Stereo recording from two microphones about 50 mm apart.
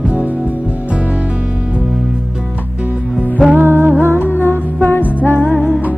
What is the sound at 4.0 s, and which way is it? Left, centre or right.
Music, left.